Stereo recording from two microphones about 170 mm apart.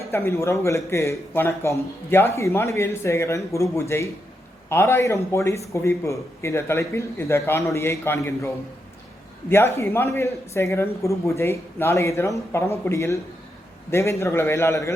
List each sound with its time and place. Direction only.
0.0 s a man's voice: 15° left (ahead or behind)